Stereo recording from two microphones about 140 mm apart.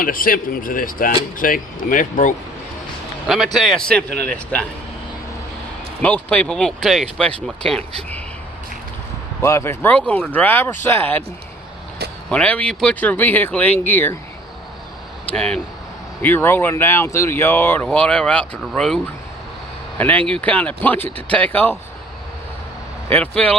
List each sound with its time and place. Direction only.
0.0 s speech: 90° left; by 2.3 s 70° left (ahead or behind)
3.2 s a man's voice: centre (ahead or behind)
6.0 s speech: 10° left (ahead or behind)
9.4 s speech: 20° left (ahead or behind)
12.3 s speech: 10° left (ahead or behind)
15.3 s a man's voice: 5° left (ahead or behind)
20.0 s speech: 10° left (ahead or behind)
23.0 s speech: 10° left (ahead or behind)